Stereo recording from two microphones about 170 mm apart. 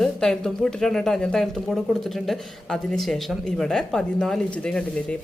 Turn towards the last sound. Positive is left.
turn(degrees=5)  # may be behind; listen again after turning